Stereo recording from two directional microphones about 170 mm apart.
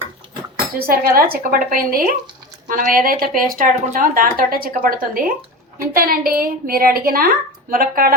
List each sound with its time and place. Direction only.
0.8 s speech: 60° right (ahead or behind)